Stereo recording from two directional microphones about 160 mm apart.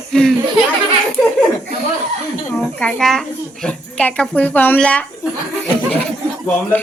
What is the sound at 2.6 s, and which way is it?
A child's voice, 5° left (ahead or behind).